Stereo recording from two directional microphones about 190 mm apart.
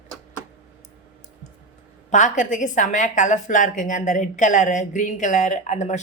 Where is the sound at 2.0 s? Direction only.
40° left (ahead or behind).